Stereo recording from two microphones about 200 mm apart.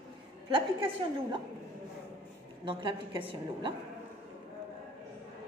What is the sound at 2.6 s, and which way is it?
A woman's voice, 25° right (ahead or behind).